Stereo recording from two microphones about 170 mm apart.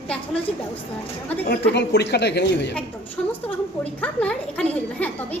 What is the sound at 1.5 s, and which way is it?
A woman's voice, 80° left.